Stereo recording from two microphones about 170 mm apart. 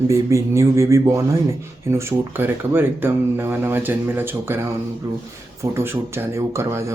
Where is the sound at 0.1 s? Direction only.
20° right (ahead or behind).